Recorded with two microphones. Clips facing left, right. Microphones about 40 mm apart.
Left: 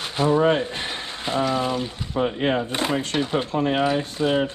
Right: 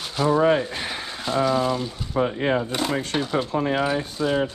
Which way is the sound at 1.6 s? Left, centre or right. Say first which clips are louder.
Right 1 dB; centre.